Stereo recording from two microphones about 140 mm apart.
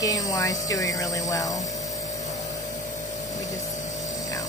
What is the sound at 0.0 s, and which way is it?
Speech, 25° left (ahead or behind).